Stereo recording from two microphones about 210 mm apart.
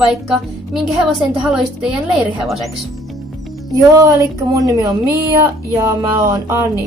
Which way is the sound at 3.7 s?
15° right (ahead or behind).